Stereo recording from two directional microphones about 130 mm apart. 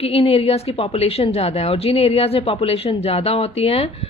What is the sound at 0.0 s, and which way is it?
A woman's voice, 50° left (ahead or behind).